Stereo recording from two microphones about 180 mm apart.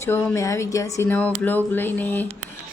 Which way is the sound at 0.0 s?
10° left (ahead or behind).